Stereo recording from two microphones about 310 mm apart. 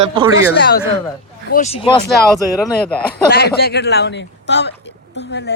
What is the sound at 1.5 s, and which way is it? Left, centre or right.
Speech, left.